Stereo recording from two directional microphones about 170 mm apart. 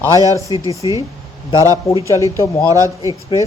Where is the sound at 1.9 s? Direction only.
Centre (ahead or behind).